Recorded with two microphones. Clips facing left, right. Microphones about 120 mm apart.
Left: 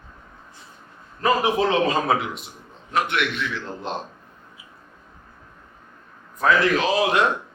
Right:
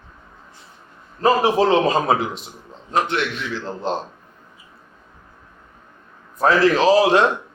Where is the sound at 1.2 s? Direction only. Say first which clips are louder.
Right 4 dB; 30° right (ahead or behind).